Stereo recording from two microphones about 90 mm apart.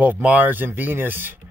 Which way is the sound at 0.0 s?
20° right (ahead or behind).